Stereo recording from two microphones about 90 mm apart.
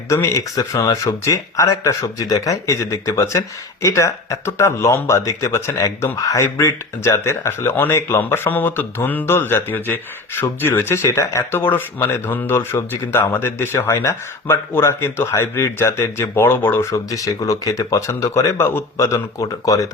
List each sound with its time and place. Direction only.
0.1 s speech: 35° left (ahead or behind)
16.9 s speech: 40° left (ahead or behind)
18.5 s speech: 25° left (ahead or behind)